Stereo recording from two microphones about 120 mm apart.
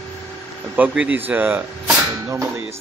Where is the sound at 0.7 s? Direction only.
15° right (ahead or behind).